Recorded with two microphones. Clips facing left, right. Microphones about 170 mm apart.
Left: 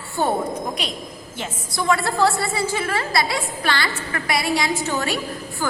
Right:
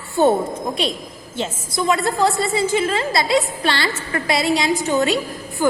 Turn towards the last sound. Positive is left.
turn(degrees=-20)  # may be behind; listen again after turning